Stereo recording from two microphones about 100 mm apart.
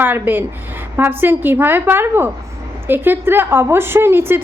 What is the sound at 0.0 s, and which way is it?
A woman's voice, 20° right (ahead or behind).